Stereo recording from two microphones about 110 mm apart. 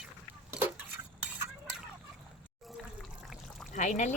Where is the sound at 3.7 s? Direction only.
90° left.